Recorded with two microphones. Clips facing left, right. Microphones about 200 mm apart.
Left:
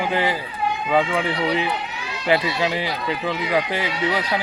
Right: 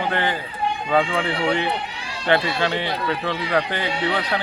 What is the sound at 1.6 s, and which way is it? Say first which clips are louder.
Run: even; 30° right (ahead or behind).